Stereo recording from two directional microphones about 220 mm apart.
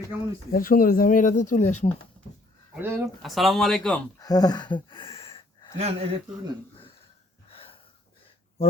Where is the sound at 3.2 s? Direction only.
Centre (ahead or behind).